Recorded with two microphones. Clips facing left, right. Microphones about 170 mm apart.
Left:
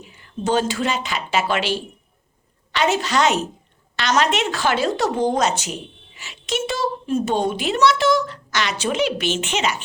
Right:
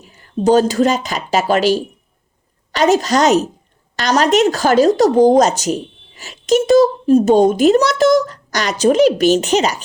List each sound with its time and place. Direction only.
0.0 s a woman's voice: 40° right (ahead or behind)